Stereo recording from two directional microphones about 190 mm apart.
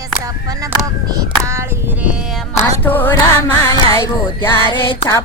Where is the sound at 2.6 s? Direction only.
10° left (ahead or behind).